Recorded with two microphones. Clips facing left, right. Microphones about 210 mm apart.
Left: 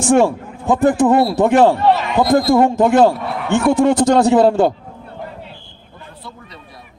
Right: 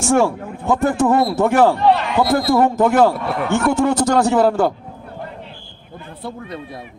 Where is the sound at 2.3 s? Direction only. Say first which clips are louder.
Left 4 dB; 15° left (ahead or behind).